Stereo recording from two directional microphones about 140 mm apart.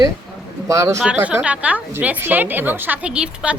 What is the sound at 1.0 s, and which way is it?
A woman's voice, 10° right (ahead or behind).